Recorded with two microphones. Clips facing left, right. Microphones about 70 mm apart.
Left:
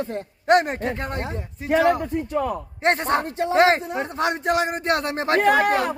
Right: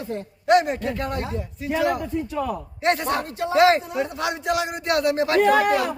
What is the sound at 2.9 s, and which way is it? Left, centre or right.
A man's voice, left.